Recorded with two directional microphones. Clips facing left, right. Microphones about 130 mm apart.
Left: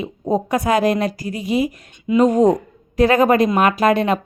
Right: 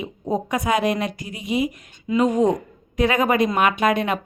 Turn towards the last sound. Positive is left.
turn(degrees=30)  # may be behind; listen again after turning